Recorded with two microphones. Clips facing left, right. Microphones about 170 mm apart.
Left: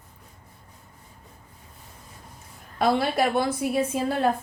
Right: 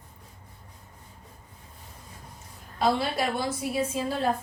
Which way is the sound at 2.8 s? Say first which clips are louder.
Left 3 dB; 60° left (ahead or behind).